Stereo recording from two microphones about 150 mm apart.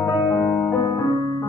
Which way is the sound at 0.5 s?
15° left (ahead or behind).